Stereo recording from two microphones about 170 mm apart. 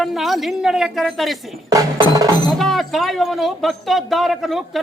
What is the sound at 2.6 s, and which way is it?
A woman's voice, centre (ahead or behind).